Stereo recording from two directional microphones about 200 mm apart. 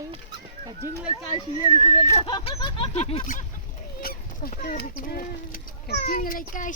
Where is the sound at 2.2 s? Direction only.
25° left (ahead or behind).